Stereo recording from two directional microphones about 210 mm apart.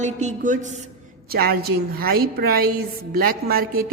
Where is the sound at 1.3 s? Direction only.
45° right (ahead or behind).